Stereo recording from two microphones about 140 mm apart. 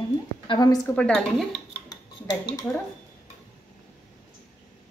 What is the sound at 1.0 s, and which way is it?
Speech, 5° left (ahead or behind).